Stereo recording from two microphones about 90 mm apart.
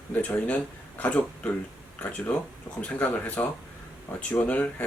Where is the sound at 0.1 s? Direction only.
15° left (ahead or behind).